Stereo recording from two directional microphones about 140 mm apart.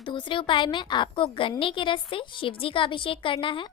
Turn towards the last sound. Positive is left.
turn(degrees=35)  # may be behind; listen again after turning